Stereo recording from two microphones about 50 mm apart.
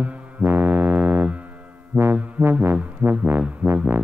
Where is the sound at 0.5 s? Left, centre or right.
Right.